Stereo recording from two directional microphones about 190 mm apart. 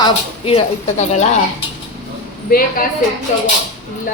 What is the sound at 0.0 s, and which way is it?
Speech, 30° left (ahead or behind).